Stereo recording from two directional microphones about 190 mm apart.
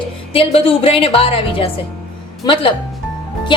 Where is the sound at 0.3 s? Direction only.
30° left (ahead or behind).